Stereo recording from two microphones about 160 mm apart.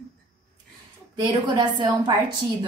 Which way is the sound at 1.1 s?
30° right (ahead or behind).